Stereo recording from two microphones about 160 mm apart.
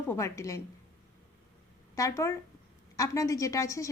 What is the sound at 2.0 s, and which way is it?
A woman's voice, 20° left (ahead or behind).